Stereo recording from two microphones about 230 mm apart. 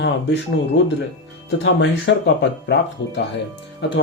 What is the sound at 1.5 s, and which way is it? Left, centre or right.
Speech, left.